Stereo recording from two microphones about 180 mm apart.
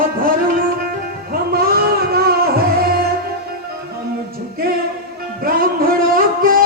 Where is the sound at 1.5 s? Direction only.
60° right (ahead or behind).